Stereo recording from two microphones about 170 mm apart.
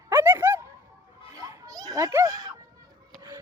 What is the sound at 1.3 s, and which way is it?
Children playing, 20° right (ahead or behind).